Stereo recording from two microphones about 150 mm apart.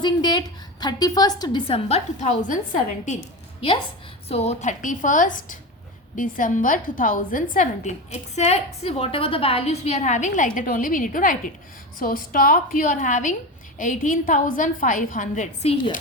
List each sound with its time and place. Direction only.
0.0 s a woman's voice: 30° left (ahead or behind); by 2.6 s 55° left (ahead or behind)
4.3 s a woman's voice: 45° left (ahead or behind); by 7.4 s 65° left (ahead or behind)
7.5 s a woman's voice: 55° left (ahead or behind)